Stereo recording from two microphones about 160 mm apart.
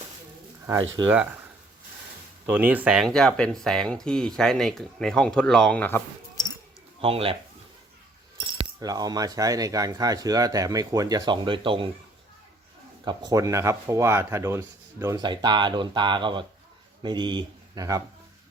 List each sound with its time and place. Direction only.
0.7 s speech: 20° right (ahead or behind)
2.5 s speech: 10° right (ahead or behind); by 6.0 s 10° left (ahead or behind)
7.0 s speech: 35° right (ahead or behind)
8.8 s speech: 25° right (ahead or behind)
13.1 s speech: 25° right (ahead or behind)